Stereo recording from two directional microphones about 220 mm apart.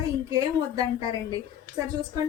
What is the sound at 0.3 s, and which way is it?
A woman's voice, 15° right (ahead or behind).